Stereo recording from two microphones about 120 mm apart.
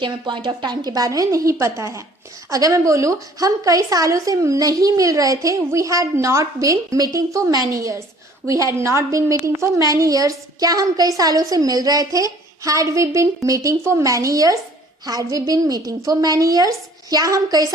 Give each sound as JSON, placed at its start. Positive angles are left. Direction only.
{"t": 0.0, "sound": "a woman's voice", "side_deg": -40}